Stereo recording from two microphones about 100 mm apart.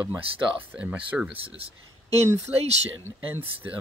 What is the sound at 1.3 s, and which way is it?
Speech, 70° right (ahead or behind).